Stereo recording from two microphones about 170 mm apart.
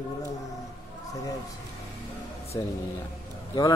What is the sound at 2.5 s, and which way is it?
Speech, 20° left (ahead or behind).